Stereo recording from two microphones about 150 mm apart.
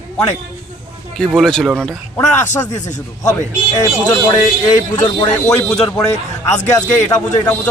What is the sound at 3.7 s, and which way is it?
A man's voice, 25° left (ahead or behind).